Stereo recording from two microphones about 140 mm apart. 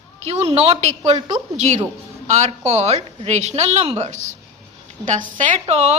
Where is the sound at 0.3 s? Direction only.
50° right (ahead or behind).